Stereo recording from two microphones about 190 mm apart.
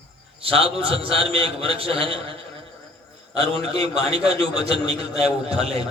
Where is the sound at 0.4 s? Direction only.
30° right (ahead or behind).